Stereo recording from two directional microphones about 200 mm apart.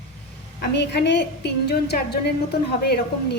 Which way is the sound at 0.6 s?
55° left (ahead or behind).